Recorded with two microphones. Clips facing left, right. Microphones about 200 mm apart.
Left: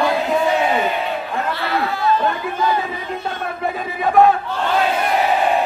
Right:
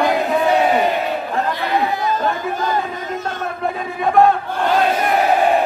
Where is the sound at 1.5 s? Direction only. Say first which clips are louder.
Right 2 dB; 15° right (ahead or behind).